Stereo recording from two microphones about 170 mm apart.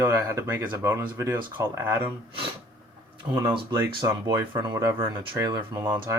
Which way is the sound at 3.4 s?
25° right (ahead or behind).